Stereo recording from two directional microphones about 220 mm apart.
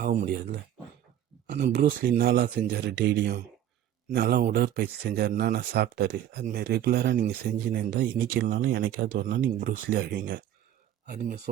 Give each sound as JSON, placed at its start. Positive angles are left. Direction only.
{"t": 0.0, "sound": "speech", "side_deg": -40}
{"t": 1.5, "sound": "speech", "side_deg": -50}
{"t": 8.4, "sound": "speech", "side_deg": -40}